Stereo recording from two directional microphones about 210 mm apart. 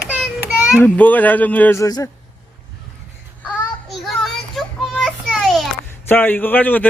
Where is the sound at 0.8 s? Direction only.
10° left (ahead or behind).